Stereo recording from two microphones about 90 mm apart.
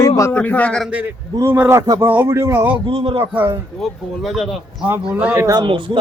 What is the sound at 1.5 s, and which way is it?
A man's voice, 20° right (ahead or behind).